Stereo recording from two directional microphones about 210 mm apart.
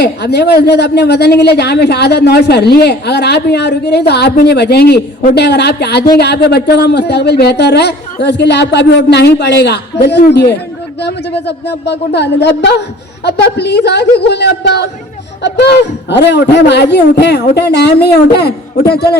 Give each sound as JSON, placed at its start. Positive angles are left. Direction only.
{"t": 0.0, "sound": "a man's voice", "side_deg": 50}